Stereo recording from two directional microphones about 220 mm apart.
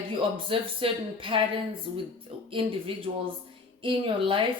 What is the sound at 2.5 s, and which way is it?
Speech, 25° right (ahead or behind).